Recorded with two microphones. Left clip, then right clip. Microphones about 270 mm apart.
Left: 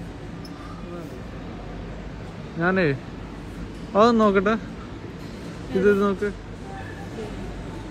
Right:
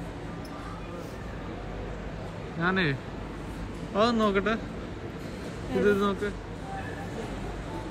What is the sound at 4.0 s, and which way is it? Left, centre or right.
Speech, centre.